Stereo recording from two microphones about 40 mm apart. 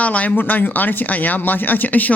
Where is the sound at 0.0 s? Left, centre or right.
Left.